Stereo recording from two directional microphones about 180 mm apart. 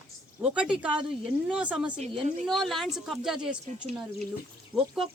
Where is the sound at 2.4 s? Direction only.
Centre (ahead or behind).